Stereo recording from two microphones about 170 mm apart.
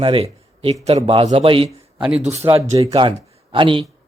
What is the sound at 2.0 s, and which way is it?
Speech, 10° right (ahead or behind).